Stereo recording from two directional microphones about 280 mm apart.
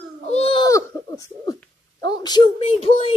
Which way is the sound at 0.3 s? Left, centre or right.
Centre.